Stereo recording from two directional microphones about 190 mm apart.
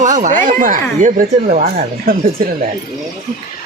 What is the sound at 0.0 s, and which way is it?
Speech, 40° right (ahead or behind).